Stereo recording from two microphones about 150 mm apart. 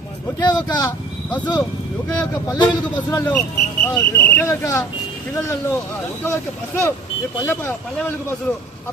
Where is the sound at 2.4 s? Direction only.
25° left (ahead or behind).